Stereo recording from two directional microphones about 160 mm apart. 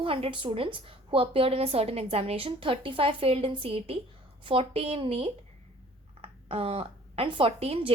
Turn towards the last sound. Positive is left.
turn(degrees=-35)  # may be behind; listen again after turning